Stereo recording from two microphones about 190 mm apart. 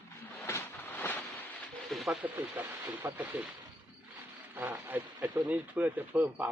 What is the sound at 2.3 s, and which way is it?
Speech, 10° right (ahead or behind).